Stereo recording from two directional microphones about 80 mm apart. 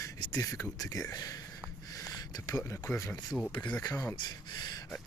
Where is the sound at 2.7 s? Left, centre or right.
Left.